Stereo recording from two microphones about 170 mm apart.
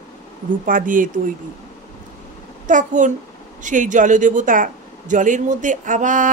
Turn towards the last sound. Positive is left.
turn(degrees=-50)  # may be behind; listen again after turning